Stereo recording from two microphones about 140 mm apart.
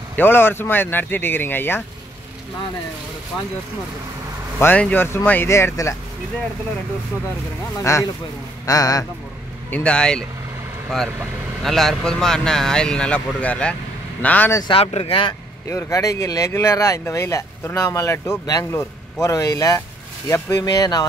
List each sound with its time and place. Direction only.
0.1 s speech: 15° left (ahead or behind)
4.6 s speech: 10° left (ahead or behind)
7.8 s speech: 20° left (ahead or behind)
9.7 s speech: 5° left (ahead or behind)
11.6 s speech: centre (ahead or behind)
14.6 s speech: 40° left (ahead or behind)
15.7 s speech: 20° left (ahead or behind)